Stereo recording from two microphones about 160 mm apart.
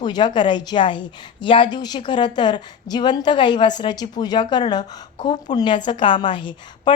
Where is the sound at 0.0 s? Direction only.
30° left (ahead or behind).